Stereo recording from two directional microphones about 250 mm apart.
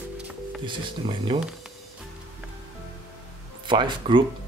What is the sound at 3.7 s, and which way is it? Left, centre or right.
Speech, centre.